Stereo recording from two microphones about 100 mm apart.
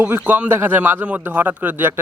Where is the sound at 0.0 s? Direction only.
20° right (ahead or behind).